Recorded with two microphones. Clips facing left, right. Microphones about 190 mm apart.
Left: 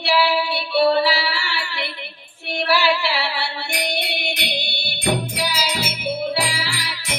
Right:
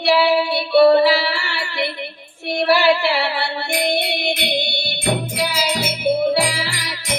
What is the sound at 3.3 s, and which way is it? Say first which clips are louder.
Music: right 5 dB; 50° right (ahead or behind).